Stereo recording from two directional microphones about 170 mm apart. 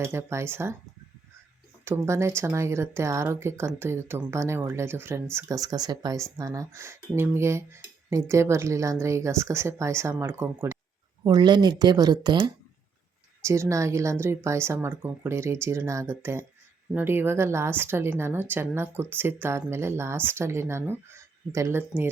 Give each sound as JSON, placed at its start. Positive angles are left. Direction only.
{"t": 0.0, "sound": "speech", "side_deg": -15}
{"t": 1.8, "sound": "speech", "side_deg": -15}
{"t": 11.2, "sound": "speech", "side_deg": -25}